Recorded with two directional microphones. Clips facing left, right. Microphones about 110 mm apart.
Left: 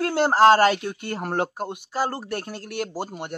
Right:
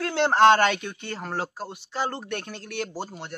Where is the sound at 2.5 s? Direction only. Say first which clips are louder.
Left 3 dB; 45° left (ahead or behind).